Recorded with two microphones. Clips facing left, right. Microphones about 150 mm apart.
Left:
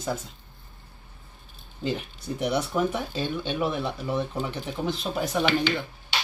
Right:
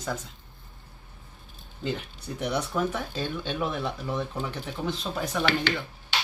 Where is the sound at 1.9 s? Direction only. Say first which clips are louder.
Left 3 dB; 10° left (ahead or behind).